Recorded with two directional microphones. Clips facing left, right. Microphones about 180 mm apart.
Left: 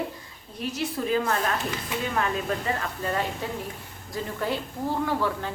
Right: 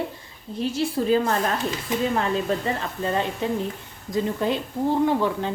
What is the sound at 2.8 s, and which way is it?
A woman's voice, 25° right (ahead or behind).